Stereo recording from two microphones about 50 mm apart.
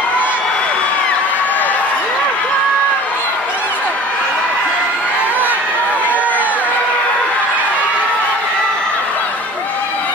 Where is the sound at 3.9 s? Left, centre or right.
Left.